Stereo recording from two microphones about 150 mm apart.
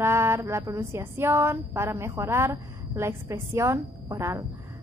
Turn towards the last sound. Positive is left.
turn(degrees=-20)  # may be behind; listen again after turning